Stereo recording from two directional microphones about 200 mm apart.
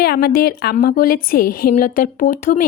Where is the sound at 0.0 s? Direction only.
50° left (ahead or behind).